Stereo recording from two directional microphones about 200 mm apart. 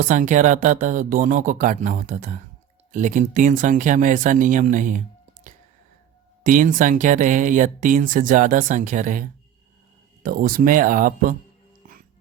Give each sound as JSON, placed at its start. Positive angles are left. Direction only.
{"t": 0.0, "sound": "speech", "side_deg": -40}